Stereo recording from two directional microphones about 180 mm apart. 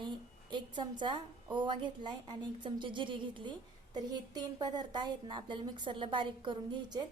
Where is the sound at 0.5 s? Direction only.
25° right (ahead or behind).